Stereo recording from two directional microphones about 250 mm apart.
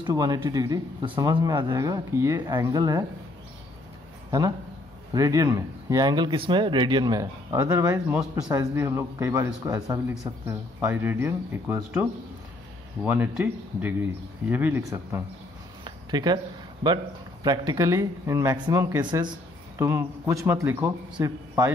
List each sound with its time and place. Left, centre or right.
0.0 s speech: centre
4.3 s speech: centre
15.8 s a sound: centre
16.8 s speech: centre